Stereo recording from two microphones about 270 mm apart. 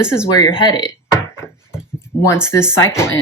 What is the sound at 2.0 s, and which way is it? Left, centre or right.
Speech, centre.